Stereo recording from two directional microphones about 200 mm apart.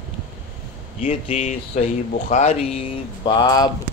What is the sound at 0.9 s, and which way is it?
Speech, 30° left (ahead or behind).